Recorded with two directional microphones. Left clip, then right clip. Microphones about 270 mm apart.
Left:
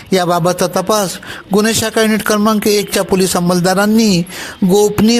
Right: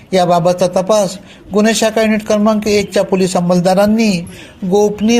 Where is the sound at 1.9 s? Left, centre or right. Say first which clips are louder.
Even; left.